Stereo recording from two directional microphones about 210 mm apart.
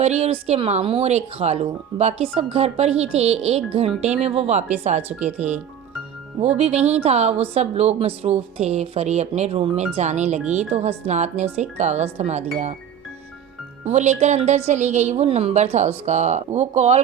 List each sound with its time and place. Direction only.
0.0 s a woman's voice: 30° right (ahead or behind)
13.8 s a woman's voice: 35° right (ahead or behind)